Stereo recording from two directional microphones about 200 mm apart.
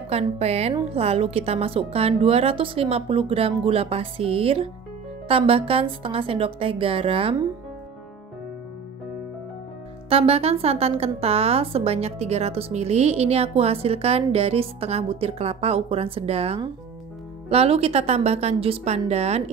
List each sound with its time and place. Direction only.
0.1 s a woman's voice: 30° right (ahead or behind)
10.0 s speech: 30° right (ahead or behind)